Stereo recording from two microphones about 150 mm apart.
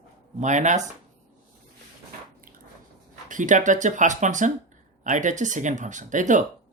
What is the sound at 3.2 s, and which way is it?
Speech, 60° right (ahead or behind).